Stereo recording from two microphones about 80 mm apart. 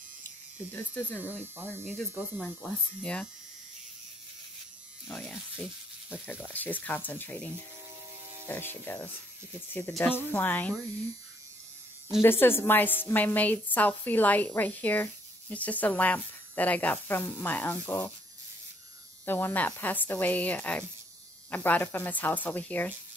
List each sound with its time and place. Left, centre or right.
0.7 s speech: left
1.2 s speech: right
2.6 s speech: centre
5.2 s speech: centre
6.0 s speech: left
12.2 s speech: left
19.2 s speech: left